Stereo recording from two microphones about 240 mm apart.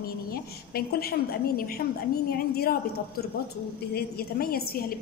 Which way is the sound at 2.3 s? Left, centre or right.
Left.